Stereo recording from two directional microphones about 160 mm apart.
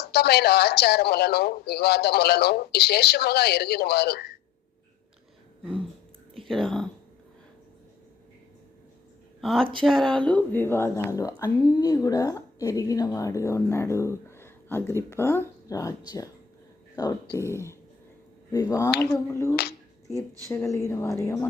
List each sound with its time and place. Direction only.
0.0 s speech: 90° left
6.3 s a sound: centre (ahead or behind)
9.4 s speech: centre (ahead or behind); by 17.7 s 15° left (ahead or behind)
18.9 s speech: 20° left (ahead or behind)